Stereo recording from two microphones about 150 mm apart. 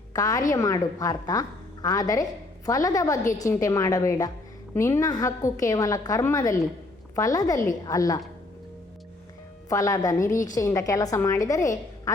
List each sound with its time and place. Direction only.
0.1 s a woman's voice: 25° left (ahead or behind)
9.6 s a woman's voice: 25° left (ahead or behind)